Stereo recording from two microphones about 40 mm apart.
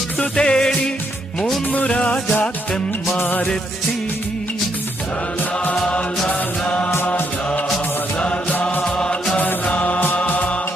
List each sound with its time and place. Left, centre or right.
0.2 s music: left
1.7 s music: left
3.2 s music: left
5.9 s mantra: left
8.8 s music: left
9.6 s mantra: left
10.2 s music: left